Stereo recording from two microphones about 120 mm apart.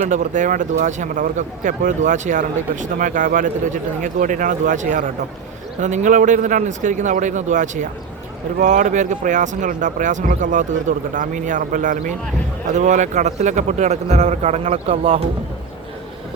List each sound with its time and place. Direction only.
0.1 s a man's voice: 90° right; by 15.2 s 65° right (ahead or behind)